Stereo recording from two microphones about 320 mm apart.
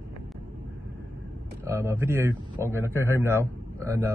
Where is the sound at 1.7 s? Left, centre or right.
Centre.